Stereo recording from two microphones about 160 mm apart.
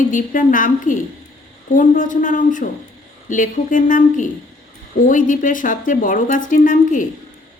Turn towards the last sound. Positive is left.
turn(degrees=55)  # may be behind; listen again after turning